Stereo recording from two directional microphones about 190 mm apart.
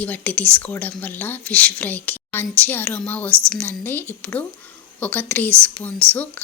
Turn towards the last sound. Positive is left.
turn(degrees=10)  # may be behind; listen again after turning